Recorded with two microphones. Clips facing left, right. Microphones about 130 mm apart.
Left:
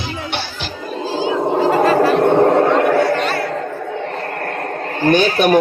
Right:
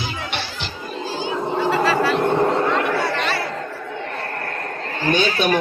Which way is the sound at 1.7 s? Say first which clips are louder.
Left 5 dB; 50° left (ahead or behind).